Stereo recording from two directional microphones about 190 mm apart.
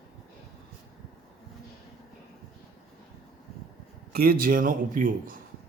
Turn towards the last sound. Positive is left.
turn(degrees=-45)  # may be behind; listen again after turning